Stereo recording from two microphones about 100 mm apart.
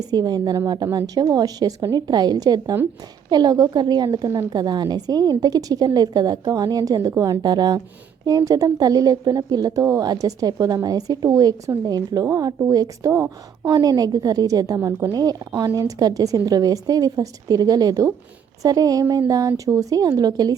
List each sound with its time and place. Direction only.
0.0 s a woman's voice: 40° right (ahead or behind)
14.8 s a woman's voice: 25° right (ahead or behind)
15.1 s a woman's voice: 40° right (ahead or behind)